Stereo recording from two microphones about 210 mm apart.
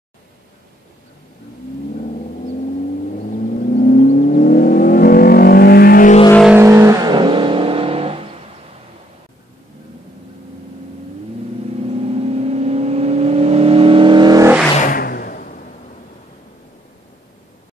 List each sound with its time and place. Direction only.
3.5 s vehicle: 40° left (ahead or behind)
6.5 s car: 15° right (ahead or behind)
12.1 s vehicle: 30° right (ahead or behind)
14.8 s a sound: 40° left (ahead or behind)